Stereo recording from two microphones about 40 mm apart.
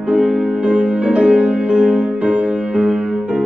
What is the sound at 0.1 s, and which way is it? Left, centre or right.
Music, right.